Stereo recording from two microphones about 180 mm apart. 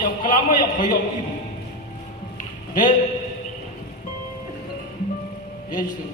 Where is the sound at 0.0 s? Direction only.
50° left (ahead or behind).